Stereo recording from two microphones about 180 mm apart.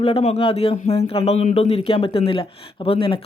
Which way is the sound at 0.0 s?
35° left (ahead or behind).